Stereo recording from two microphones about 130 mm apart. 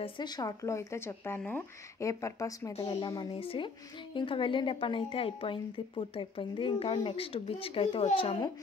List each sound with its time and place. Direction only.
0.0 s speech: 30° left (ahead or behind)
2.8 s speech: 40° left (ahead or behind)